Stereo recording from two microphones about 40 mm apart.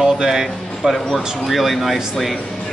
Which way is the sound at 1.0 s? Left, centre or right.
Centre.